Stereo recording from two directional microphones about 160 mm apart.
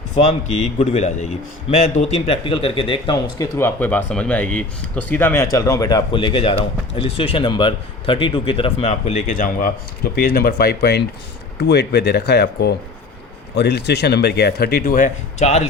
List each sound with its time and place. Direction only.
0.8 s speech: 45° left (ahead or behind); by 3.7 s 20° left (ahead or behind)
3.8 s speech: 10° left (ahead or behind); by 9.7 s 60° left (ahead or behind)
10.2 s speech: 70° left (ahead or behind); by 15.6 s 45° left (ahead or behind)